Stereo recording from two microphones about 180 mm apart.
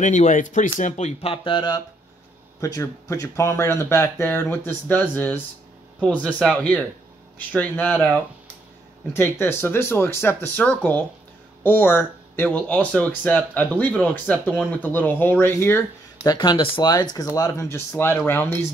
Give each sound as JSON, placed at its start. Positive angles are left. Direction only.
{"t": 0.0, "sound": "speech", "side_deg": 45}
{"t": 16.2, "sound": "speech", "side_deg": 25}